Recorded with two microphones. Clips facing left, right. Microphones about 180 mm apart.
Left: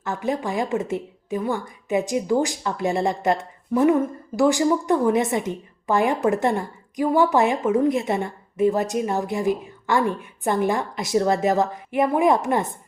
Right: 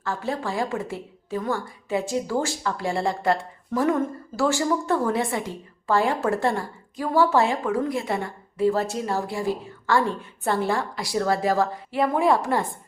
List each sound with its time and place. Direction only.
0.0 s a woman's voice: 20° left (ahead or behind)